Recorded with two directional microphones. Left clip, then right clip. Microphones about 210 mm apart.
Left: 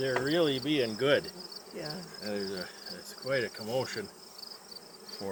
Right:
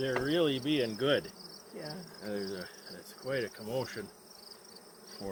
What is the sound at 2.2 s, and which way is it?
Cricket, 5° left (ahead or behind).